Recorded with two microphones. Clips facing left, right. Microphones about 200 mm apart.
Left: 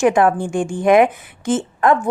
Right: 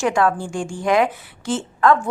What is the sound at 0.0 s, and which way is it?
A woman's voice, 20° left (ahead or behind).